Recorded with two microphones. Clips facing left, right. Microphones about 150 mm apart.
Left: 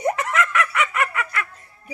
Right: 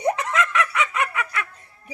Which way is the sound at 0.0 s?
25° right (ahead or behind).